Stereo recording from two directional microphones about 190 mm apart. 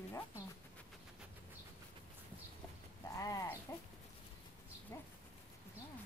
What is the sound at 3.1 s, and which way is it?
Sheep, 20° left (ahead or behind).